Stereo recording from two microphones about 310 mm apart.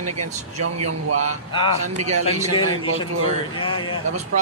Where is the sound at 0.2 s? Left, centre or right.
Right.